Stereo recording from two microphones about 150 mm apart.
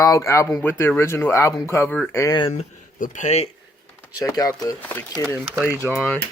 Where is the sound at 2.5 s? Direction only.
50° left (ahead or behind).